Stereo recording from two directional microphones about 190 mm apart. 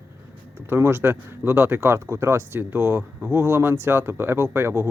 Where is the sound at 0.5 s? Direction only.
15° right (ahead or behind).